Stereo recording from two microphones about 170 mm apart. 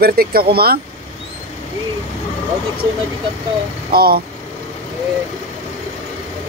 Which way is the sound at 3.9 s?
65° right (ahead or behind).